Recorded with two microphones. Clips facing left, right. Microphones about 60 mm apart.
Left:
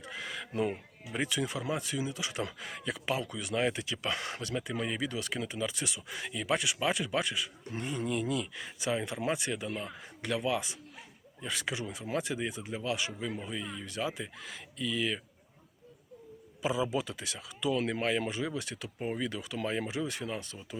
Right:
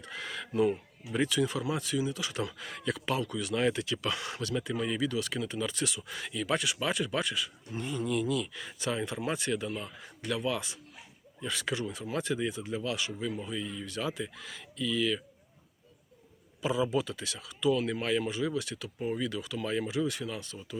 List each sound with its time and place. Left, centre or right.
0.0 s a sound: centre
0.5 s speech: left
5.5 s speech: centre
9.6 s speech: left
16.6 s speech: centre